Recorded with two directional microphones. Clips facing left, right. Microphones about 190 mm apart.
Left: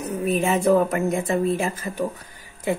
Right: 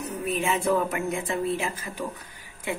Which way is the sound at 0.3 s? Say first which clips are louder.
Left 6 dB; 40° left (ahead or behind).